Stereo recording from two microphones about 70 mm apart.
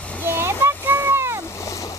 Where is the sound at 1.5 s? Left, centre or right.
Left.